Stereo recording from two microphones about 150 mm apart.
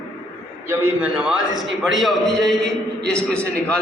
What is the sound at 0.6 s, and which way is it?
A man's voice, 10° right (ahead or behind).